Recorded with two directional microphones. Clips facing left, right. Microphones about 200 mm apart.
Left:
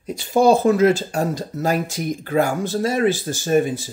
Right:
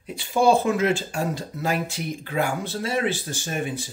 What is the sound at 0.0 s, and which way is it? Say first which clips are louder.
Speech: left 4 dB; 40° left (ahead or behind).